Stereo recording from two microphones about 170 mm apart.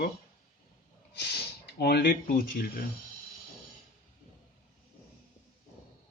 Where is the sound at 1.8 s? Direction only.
70° left (ahead or behind); by 2.6 s 55° left (ahead or behind).